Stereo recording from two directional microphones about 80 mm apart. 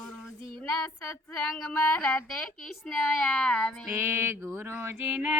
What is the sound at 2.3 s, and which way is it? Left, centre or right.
Speech, centre.